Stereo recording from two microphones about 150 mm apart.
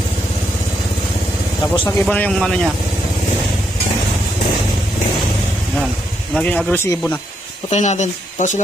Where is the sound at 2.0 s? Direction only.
10° left (ahead or behind).